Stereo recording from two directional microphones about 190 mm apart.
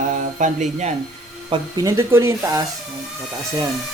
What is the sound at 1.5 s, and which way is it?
Speech, 15° right (ahead or behind).